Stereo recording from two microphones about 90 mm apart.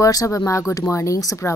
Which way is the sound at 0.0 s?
40° left (ahead or behind).